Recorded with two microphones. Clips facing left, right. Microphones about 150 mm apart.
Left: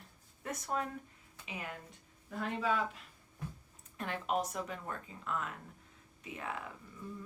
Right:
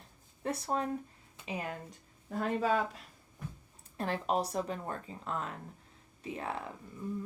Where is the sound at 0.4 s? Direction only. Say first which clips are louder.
Right 4 dB; 30° right (ahead or behind).